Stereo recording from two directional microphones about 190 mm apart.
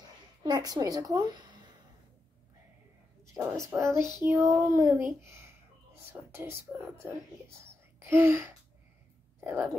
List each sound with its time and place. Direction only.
0.4 s a woman's voice: 20° right (ahead or behind)
3.7 s speech: 15° right (ahead or behind)